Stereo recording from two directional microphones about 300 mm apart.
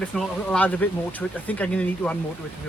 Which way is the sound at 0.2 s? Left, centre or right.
Centre.